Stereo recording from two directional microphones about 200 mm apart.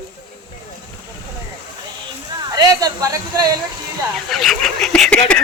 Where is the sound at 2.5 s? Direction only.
20° right (ahead or behind).